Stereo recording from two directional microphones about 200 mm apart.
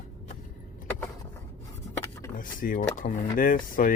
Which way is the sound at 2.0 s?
15° left (ahead or behind).